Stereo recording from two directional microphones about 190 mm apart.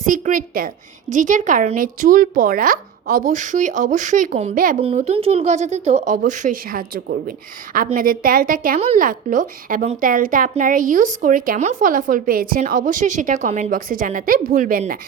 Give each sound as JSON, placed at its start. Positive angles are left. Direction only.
{"t": 0.0, "sound": "a woman's voice", "side_deg": -45}
{"t": 4.8, "sound": "a woman's voice", "side_deg": -30}